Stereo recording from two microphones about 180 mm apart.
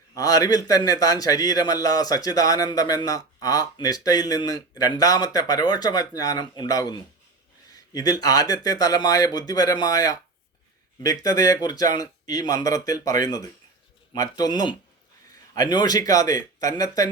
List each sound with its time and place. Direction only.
0.1 s a man's voice: 20° left (ahead or behind)